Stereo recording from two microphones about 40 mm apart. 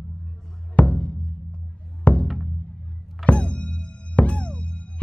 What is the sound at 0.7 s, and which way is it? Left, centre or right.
Music, left.